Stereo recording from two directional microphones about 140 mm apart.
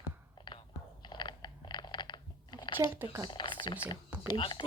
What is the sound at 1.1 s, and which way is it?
Crunch, 35° left (ahead or behind).